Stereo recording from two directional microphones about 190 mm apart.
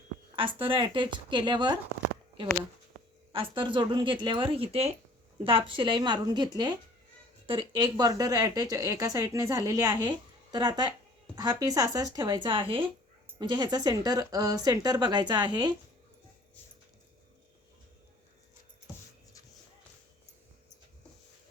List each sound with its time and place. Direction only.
0.3 s speech: 30° right (ahead or behind)
3.3 s speech: 25° right (ahead or behind)